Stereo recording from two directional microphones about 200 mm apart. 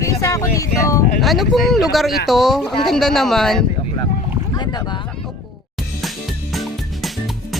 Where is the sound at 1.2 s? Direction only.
Centre (ahead or behind).